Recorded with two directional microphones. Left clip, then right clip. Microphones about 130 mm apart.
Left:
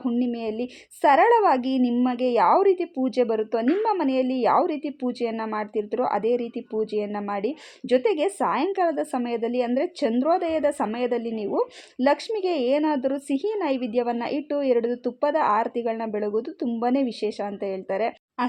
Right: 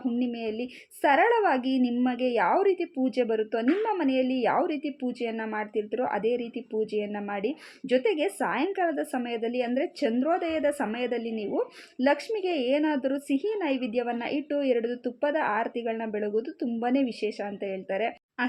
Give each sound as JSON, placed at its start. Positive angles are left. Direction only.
{"t": 0.2, "sound": "a woman's voice", "side_deg": 35}
{"t": 16.2, "sound": "speech", "side_deg": 65}
{"t": 16.6, "sound": "a woman's voice", "side_deg": 35}